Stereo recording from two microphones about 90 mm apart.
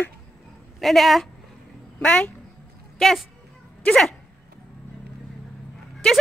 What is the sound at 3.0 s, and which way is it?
Speech, 5° left (ahead or behind).